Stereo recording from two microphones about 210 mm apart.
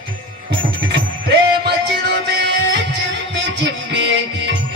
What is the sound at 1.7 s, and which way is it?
Music, 50° right (ahead or behind).